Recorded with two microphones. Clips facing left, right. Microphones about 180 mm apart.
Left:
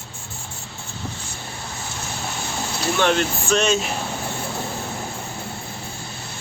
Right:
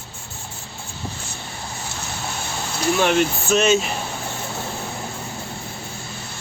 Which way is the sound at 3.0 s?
5° right (ahead or behind).